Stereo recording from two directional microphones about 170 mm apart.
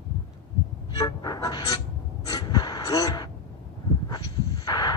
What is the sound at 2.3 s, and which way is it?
Gasp, 25° left (ahead or behind).